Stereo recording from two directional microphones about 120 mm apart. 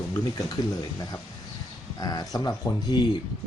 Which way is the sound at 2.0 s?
30° left (ahead or behind).